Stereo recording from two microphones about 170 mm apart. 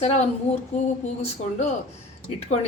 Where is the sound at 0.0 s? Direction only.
40° left (ahead or behind).